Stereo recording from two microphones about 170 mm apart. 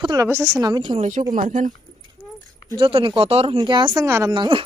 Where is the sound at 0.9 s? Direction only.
45° right (ahead or behind).